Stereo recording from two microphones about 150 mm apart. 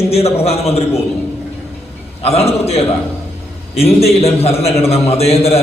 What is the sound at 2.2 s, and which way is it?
A man's voice, 40° left (ahead or behind).